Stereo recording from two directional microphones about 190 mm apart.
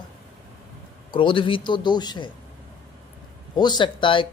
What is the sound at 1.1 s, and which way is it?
Speech, 25° left (ahead or behind).